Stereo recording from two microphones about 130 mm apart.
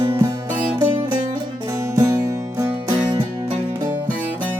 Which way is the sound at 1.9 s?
20° right (ahead or behind).